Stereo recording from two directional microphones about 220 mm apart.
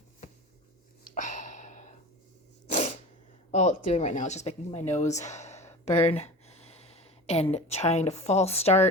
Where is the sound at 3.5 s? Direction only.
30° left (ahead or behind).